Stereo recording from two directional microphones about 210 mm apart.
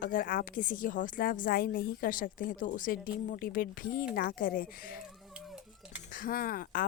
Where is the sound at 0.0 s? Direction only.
40° left (ahead or behind).